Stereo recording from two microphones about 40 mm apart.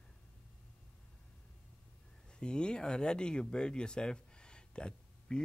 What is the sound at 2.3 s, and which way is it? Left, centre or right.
Speech, left.